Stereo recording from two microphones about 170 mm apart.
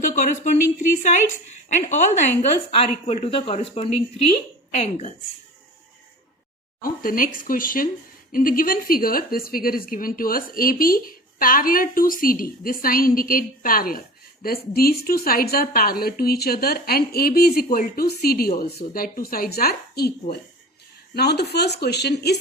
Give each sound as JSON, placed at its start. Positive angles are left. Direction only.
{"t": 0.0, "sound": "a woman's voice", "side_deg": 45}
{"t": 6.8, "sound": "a woman's voice", "side_deg": 55}
{"t": 21.2, "sound": "speech", "side_deg": 75}